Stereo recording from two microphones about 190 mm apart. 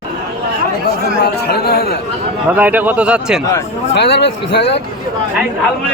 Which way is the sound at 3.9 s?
65° left (ahead or behind).